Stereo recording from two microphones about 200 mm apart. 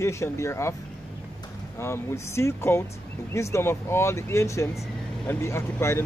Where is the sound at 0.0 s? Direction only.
15° left (ahead or behind).